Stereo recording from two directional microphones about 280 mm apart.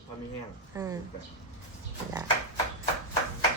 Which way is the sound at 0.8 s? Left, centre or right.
Centre.